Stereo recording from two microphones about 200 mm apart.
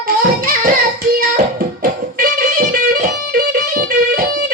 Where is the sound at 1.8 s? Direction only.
45° right (ahead or behind).